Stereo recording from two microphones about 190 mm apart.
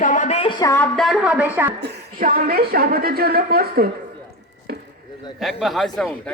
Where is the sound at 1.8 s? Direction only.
55° right (ahead or behind).